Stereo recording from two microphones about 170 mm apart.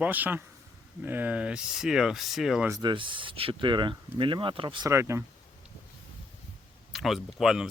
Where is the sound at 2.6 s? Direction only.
20° right (ahead or behind).